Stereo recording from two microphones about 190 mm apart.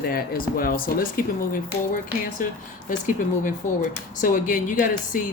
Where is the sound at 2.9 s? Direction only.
45° left (ahead or behind).